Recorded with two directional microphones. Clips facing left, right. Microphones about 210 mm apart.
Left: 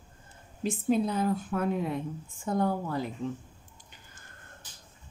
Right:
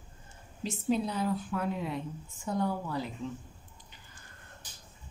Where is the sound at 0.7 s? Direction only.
50° left (ahead or behind).